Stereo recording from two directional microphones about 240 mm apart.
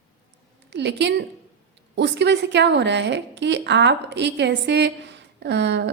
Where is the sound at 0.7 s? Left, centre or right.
Right.